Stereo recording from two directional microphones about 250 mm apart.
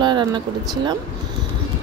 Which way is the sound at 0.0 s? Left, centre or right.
Centre.